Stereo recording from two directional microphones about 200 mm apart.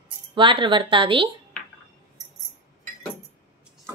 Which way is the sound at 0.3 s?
25° right (ahead or behind).